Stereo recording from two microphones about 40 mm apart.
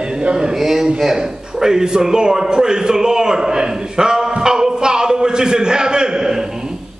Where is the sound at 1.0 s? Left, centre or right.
Centre.